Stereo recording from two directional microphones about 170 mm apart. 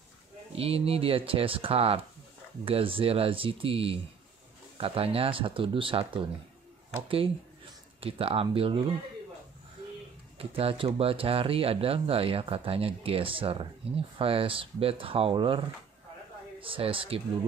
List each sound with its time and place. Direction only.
0.6 s speech: 35° right (ahead or behind)
10.4 s speech: 35° right (ahead or behind)